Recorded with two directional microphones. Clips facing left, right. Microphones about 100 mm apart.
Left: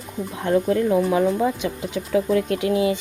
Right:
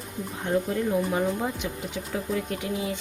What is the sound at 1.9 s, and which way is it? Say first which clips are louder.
Speech: left 11 dB; 90° left.